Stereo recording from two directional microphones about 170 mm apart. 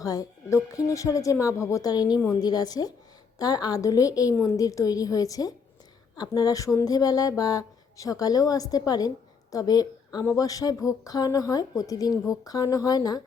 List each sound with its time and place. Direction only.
0.0 s a woman's voice: 20° left (ahead or behind)